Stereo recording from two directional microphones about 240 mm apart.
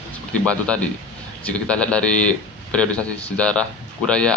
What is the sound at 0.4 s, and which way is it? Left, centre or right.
A man's voice, centre.